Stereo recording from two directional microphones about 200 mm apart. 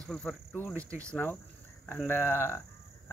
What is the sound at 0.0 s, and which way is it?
Speech, 5° left (ahead or behind).